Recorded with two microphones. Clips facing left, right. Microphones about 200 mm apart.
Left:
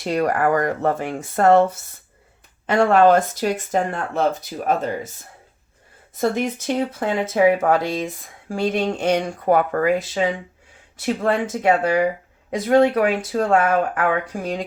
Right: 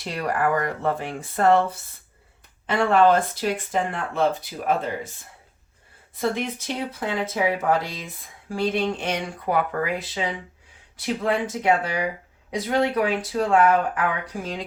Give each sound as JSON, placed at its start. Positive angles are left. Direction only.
{"t": 0.0, "sound": "speech", "side_deg": 45}
{"t": 7.0, "sound": "speech", "side_deg": 50}